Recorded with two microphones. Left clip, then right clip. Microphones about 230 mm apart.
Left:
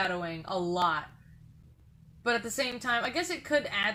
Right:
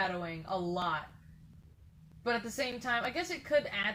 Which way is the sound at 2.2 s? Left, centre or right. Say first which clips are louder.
Left 4 dB; left.